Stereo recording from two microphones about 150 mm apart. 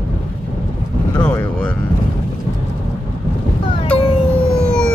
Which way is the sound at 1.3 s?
10° left (ahead or behind).